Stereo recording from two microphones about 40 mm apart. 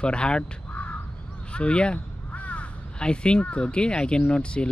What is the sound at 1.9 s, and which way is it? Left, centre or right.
Crow, left.